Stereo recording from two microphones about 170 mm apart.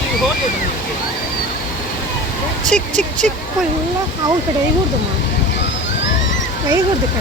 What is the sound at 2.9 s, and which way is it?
Speech, 45° right (ahead or behind).